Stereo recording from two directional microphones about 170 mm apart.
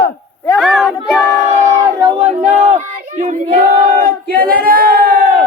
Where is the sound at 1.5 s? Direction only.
45° right (ahead or behind).